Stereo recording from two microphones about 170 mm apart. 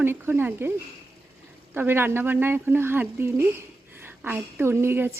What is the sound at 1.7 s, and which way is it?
A woman's voice, 10° right (ahead or behind).